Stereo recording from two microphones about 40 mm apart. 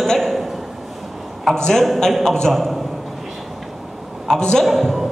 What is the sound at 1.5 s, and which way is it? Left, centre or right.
A man's voice, centre.